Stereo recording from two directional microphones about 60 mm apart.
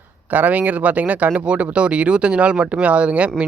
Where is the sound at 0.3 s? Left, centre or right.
Right.